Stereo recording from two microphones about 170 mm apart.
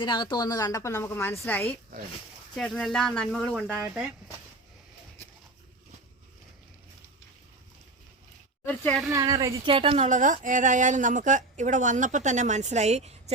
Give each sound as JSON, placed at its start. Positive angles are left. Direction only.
{"t": 0.0, "sound": "a woman's voice", "side_deg": 25}
{"t": 8.6, "sound": "a sound", "side_deg": 5}
{"t": 9.0, "sound": "speech", "side_deg": -20}